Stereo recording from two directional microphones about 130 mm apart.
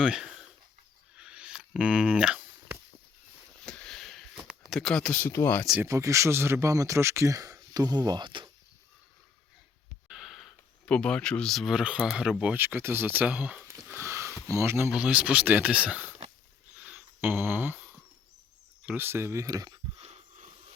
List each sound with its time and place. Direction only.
0.0 s speech: 5° right (ahead or behind)
1.1 s a sound: 10° right (ahead or behind)
3.6 s sniff: 5° left (ahead or behind)
5.3 s speech: 15° left (ahead or behind)
5.8 s speech: 25° right (ahead or behind)
10.1 s speech: centre (ahead or behind)
13.8 s sniff: 20° right (ahead or behind)
14.5 s speech: 20° right (ahead or behind)
14.8 s speech: 10° right (ahead or behind)
16.8 s a sound: 15° right (ahead or behind)
18.9 s speech: 15° right (ahead or behind)
20.0 s a sound: 55° right (ahead or behind)